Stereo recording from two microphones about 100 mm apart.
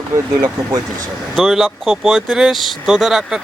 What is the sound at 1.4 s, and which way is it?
Speech, centre (ahead or behind).